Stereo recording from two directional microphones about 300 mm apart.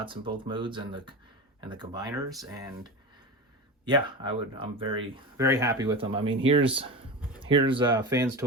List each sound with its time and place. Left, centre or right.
0.0 s speech: centre
3.8 s speech: centre